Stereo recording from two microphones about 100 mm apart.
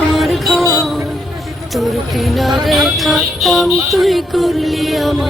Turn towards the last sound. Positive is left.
turn(degrees=0)  # may be behind; listen again after turning